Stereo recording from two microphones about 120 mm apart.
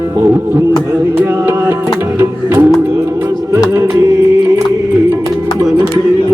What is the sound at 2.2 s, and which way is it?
Music, 20° right (ahead or behind).